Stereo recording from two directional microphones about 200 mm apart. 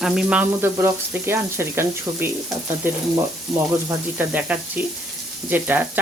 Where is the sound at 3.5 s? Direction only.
Centre (ahead or behind).